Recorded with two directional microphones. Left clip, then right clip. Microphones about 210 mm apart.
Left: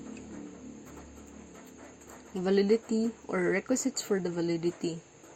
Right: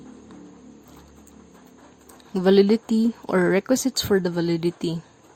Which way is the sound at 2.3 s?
40° right (ahead or behind).